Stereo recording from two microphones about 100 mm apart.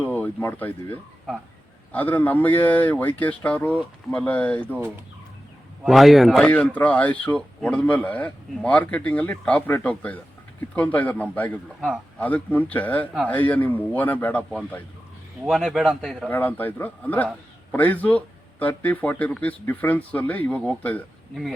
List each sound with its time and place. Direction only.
0.0 s speech: 15° left (ahead or behind)
5.8 s a man's voice: centre (ahead or behind)
6.4 s speech: 15° left (ahead or behind)
15.4 s a man's voice: 5° right (ahead or behind)
16.3 s speech: 20° left (ahead or behind)